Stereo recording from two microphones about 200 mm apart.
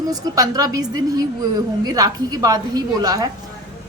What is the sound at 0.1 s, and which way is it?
A woman's voice, 15° right (ahead or behind).